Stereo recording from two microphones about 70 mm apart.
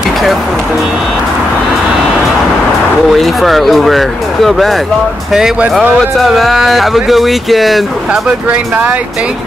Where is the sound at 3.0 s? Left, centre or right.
Centre.